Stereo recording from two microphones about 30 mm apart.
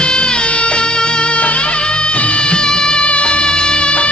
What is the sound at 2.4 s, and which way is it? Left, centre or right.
Music, left.